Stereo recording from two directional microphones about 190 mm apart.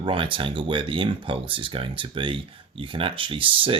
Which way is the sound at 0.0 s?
25° right (ahead or behind).